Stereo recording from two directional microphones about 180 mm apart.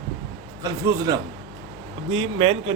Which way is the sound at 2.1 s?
30° right (ahead or behind).